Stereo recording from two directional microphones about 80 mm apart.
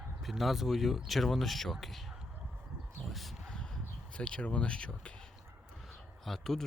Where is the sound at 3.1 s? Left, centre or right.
Centre.